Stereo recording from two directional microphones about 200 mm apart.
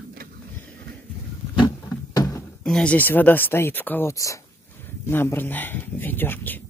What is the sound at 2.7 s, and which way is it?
Speech, 5° left (ahead or behind).